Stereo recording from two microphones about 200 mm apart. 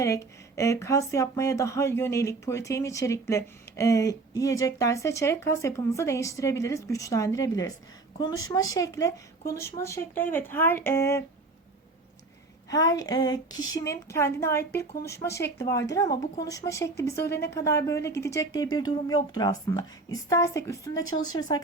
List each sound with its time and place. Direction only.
0.0 s speech: 15° left (ahead or behind)
12.7 s speech: 15° left (ahead or behind)
17.2 s speech: 55° left (ahead or behind)
17.5 s speech: 15° left (ahead or behind)